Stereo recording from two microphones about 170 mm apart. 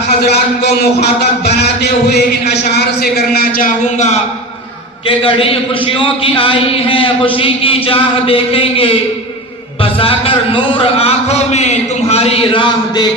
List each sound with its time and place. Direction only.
1.5 s music: 70° left (ahead or behind)
2.7 s a man's voice: 65° left (ahead or behind)
5.0 s a man's voice: 35° left (ahead or behind)